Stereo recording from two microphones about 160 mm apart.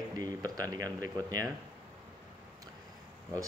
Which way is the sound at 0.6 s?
25° right (ahead or behind).